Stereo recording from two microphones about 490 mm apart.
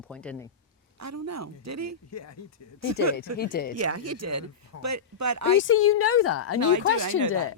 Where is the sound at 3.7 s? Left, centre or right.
Right.